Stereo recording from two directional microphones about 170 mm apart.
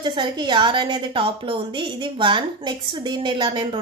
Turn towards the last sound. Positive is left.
turn(degrees=-25)  # may be behind; listen again after turning